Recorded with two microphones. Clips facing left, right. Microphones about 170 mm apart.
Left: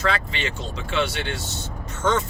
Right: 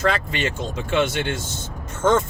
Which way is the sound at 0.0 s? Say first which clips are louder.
Right 3 dB; 50° right (ahead or behind).